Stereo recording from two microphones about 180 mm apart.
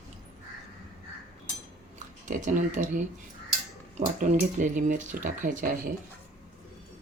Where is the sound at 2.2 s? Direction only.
45° right (ahead or behind).